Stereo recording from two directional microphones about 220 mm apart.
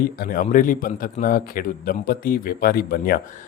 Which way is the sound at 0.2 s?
40° left (ahead or behind).